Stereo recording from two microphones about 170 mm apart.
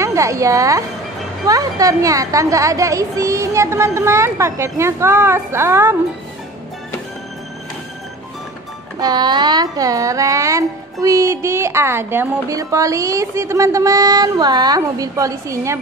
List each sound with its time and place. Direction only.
0.0 s a woman's voice: 20° right (ahead or behind)
9.0 s music: 25° right (ahead or behind)